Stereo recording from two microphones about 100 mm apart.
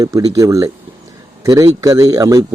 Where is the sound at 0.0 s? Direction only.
35° right (ahead or behind).